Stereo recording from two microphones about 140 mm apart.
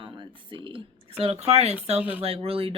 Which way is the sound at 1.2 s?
50° right (ahead or behind).